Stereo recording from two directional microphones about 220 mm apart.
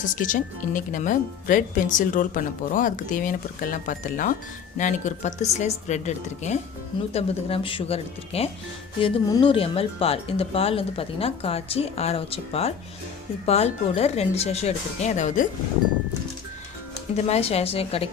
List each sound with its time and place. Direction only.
0.2 s speech: 35° left (ahead or behind)
17.2 s speech: 30° left (ahead or behind)